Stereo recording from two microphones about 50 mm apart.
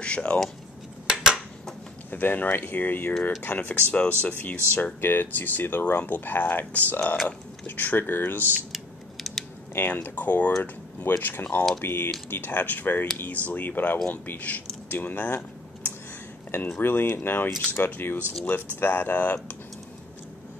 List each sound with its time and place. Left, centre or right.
0.0 s speech: left
1.0 s dishes: centre
2.0 s speech: left
9.1 s scissors: centre
9.9 s speech: left
11.8 s speech: left
16.5 s speech: left